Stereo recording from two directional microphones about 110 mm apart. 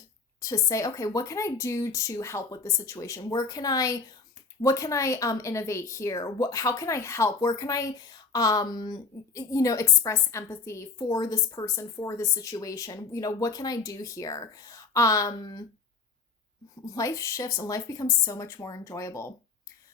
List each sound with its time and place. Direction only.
0.3 s a woman's voice: 30° left (ahead or behind)
16.8 s speech: 30° left (ahead or behind)